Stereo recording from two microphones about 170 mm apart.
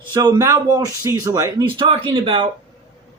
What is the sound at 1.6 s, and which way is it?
Speech, 30° right (ahead or behind).